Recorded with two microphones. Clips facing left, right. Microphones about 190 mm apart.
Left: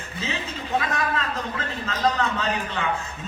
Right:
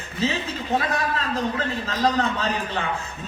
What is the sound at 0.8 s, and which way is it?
A man's voice, 35° right (ahead or behind).